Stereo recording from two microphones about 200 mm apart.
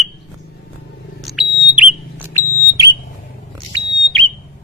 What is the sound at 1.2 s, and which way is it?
Smoke detector, centre (ahead or behind).